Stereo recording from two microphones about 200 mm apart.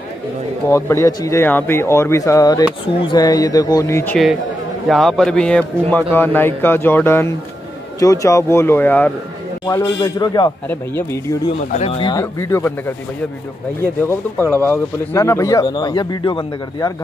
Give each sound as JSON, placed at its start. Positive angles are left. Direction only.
{"t": 0.7, "sound": "speech", "side_deg": 15}
{"t": 4.8, "sound": "speech", "side_deg": 0}
{"t": 11.7, "sound": "speech", "side_deg": 30}
{"t": 12.1, "sound": "speech", "side_deg": 15}
{"t": 14.0, "sound": "speech", "side_deg": 10}